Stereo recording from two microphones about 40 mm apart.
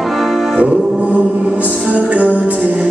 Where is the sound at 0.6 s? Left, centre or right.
Right.